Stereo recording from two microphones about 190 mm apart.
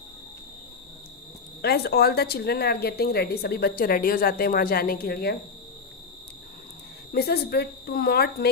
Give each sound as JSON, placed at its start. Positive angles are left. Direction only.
{"t": 1.6, "sound": "speech", "side_deg": 55}
{"t": 7.1, "sound": "speech", "side_deg": 55}